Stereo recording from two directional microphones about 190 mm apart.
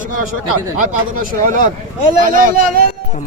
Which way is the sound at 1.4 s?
45° right (ahead or behind).